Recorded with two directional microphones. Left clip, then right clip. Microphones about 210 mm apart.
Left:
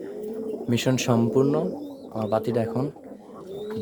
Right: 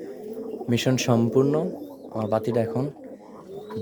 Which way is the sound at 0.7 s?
10° right (ahead or behind).